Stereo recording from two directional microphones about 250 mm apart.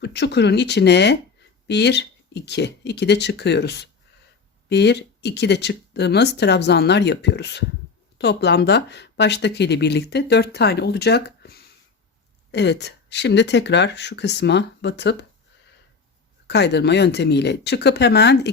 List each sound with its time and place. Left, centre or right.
0.0 s speech: left
16.5 s speech: left